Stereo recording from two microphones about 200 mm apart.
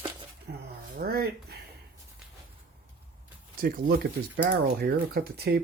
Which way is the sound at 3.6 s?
45° right (ahead or behind).